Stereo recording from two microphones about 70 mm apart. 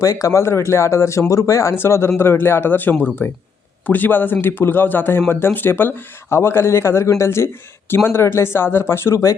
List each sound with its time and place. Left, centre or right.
0.0 s a man's voice: left
1.7 s a man's voice: left